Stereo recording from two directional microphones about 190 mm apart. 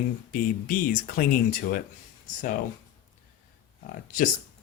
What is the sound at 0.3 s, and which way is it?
Speech, 50° left (ahead or behind).